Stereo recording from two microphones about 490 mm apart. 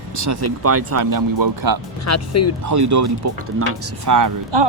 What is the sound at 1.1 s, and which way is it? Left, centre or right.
Speech, right.